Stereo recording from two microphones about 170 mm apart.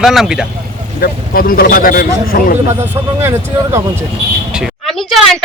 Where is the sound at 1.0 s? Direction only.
60° left (ahead or behind).